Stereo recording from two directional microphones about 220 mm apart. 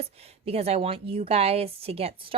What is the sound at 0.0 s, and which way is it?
Speech, 25° right (ahead or behind).